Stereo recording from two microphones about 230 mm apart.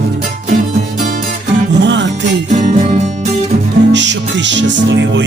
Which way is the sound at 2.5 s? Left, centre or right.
Right.